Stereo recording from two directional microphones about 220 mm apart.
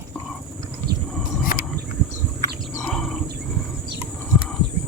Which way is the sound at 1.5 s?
40° left (ahead or behind).